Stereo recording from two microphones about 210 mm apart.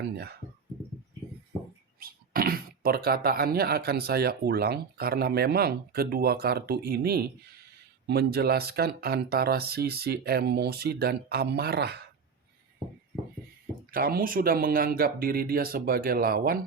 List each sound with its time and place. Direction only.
2.0 s speech: 45° right (ahead or behind)
13.9 s speech: 45° right (ahead or behind)